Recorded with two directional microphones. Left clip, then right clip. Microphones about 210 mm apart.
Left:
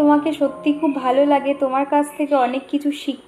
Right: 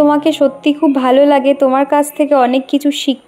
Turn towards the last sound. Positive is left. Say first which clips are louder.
# right 8 dB
turn(degrees=-45)  # may be behind; listen again after turning